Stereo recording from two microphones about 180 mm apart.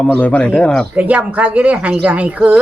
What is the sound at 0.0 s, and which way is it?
Speech, 10° left (ahead or behind).